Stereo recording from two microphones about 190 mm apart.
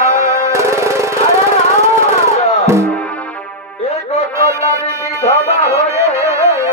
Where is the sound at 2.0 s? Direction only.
35° left (ahead or behind).